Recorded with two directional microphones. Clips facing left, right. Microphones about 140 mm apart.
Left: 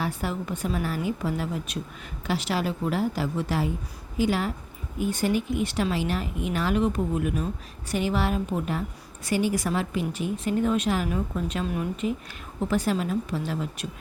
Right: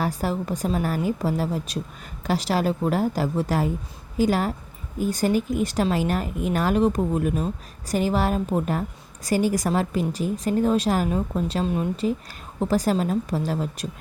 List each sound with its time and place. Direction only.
0.0 s speech: 40° right (ahead or behind)